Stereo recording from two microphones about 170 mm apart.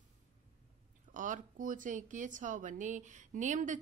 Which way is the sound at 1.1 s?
50° right (ahead or behind).